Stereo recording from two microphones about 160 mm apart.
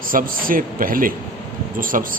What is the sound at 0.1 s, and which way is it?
Speech, 60° right (ahead or behind).